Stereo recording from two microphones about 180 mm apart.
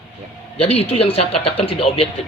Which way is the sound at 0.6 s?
35° left (ahead or behind).